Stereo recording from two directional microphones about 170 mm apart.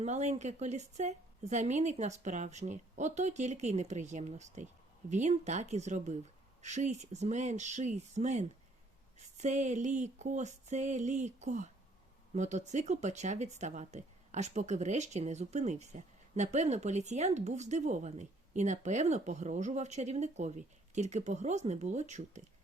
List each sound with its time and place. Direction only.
0.0 s speech: 40° right (ahead or behind)